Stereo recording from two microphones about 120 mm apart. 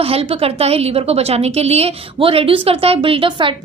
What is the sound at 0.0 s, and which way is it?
A woman's voice, 55° right (ahead or behind).